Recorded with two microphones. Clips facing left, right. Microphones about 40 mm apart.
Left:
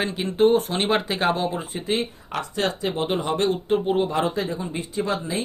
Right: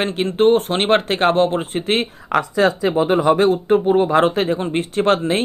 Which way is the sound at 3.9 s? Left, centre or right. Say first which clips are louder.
Right 8 dB; right.